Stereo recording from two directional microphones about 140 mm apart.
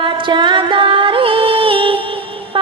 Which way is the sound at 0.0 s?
35° right (ahead or behind).